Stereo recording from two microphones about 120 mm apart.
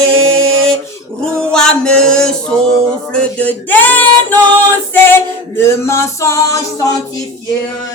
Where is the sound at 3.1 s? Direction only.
10° left (ahead or behind).